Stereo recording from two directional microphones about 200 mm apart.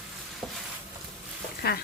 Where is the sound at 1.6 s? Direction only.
50° left (ahead or behind).